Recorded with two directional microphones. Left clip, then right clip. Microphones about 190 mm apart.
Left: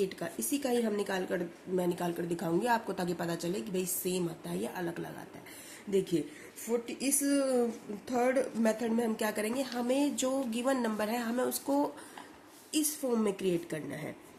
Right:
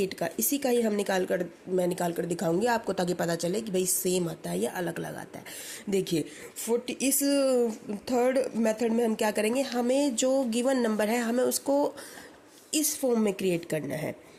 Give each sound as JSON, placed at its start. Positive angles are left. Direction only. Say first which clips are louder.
{"t": 0.0, "sound": "a woman's voice", "louder": "right 5 dB", "side_deg": -40}